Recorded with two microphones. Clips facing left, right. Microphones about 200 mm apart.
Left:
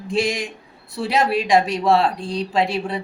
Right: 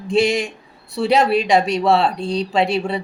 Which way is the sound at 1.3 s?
Centre (ahead or behind).